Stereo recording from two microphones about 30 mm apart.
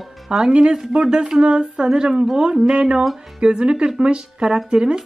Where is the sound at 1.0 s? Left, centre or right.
Right.